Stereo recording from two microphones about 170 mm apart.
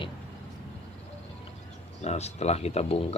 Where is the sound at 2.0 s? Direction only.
40° left (ahead or behind).